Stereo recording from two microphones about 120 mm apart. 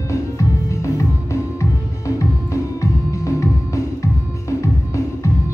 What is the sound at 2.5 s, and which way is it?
Music, 25° left (ahead or behind).